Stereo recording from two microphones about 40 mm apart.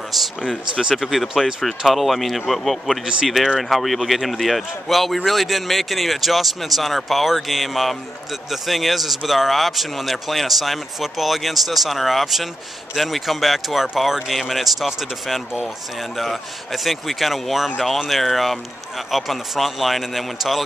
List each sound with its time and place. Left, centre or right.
0.2 s a man's voice: centre